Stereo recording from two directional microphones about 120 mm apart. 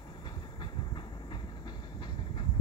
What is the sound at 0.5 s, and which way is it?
Train, 40° left (ahead or behind).